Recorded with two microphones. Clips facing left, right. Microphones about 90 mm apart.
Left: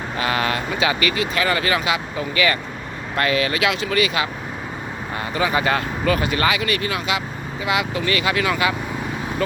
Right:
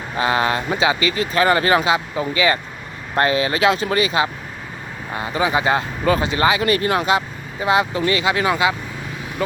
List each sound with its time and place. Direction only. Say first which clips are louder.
0.2 s speech: right 4 dB; 25° right (ahead or behind)
1.2 s speech: right 8 dB; 35° right (ahead or behind)
6.6 s speech: right 5 dB; 35° right (ahead or behind)